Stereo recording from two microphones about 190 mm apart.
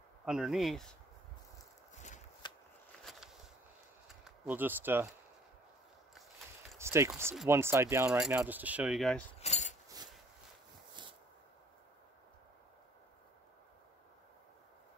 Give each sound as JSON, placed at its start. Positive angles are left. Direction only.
{"t": 0.2, "sound": "speech", "side_deg": 0}
{"t": 2.4, "sound": "shuffling cards", "side_deg": 25}
{"t": 3.1, "sound": "walk", "side_deg": 0}
{"t": 4.2, "sound": "speech", "side_deg": -10}
{"t": 6.8, "sound": "a sound", "side_deg": -15}
{"t": 7.4, "sound": "speech", "side_deg": -15}
{"t": 9.4, "sound": "keys jangling", "side_deg": 35}